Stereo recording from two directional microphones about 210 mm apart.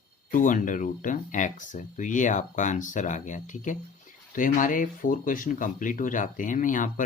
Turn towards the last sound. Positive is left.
turn(degrees=40)  # may be behind; listen again after turning